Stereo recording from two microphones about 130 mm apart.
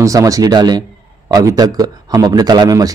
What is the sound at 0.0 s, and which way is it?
Speech, 25° right (ahead or behind).